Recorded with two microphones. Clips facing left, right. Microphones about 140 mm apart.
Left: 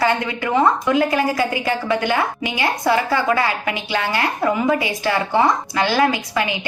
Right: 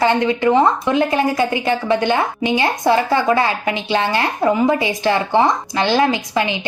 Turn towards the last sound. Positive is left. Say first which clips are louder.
# right 2 dB
turn(degrees=-25)  # may be behind; listen again after turning